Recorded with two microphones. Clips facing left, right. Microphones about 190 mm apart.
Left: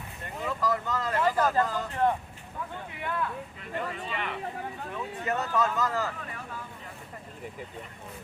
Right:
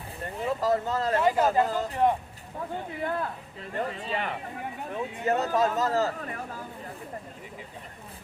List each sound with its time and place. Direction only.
0.2 s vehicle: 35° right (ahead or behind)
1.2 s speech: 20° right (ahead or behind)
3.0 s speech: 40° right (ahead or behind)